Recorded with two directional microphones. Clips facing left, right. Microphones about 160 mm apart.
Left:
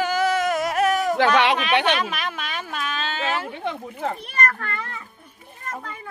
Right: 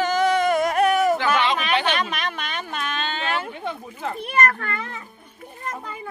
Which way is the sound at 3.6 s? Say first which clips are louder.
Left 2 dB; 60° left (ahead or behind).